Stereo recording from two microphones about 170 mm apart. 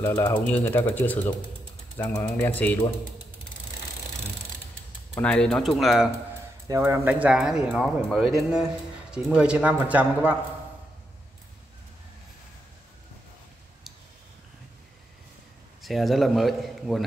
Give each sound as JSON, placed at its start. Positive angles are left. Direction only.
{"t": 0.0, "sound": "speech", "side_deg": 15}
{"t": 5.2, "sound": "speech", "side_deg": 5}
{"t": 6.7, "sound": "speech", "side_deg": -15}
{"t": 15.8, "sound": "speech", "side_deg": 0}